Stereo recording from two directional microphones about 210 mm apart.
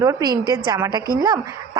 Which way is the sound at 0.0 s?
15° right (ahead or behind).